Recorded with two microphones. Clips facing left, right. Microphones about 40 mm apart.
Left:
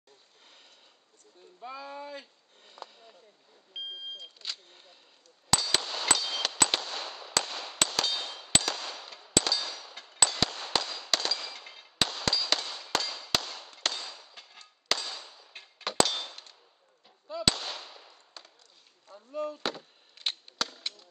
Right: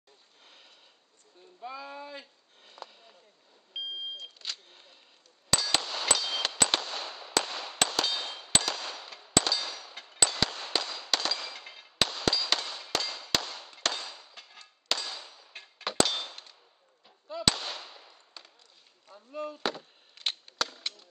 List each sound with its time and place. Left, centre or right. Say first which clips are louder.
1.6 s a sound: even; centre
4.2 s vehicle: right 1 dB; centre
5.7 s clang: even; centre
7.4 s firecracker: right 1 dB; centre
8.0 s clang: right 1 dB; centre
10.2 s firecracker: left 1 dB; centre
12.4 s clang: even; centre
17.5 s firecracker: right 1 dB; centre
19.3 s chop: left 3 dB; centre
19.6 s chop: right 2 dB; centre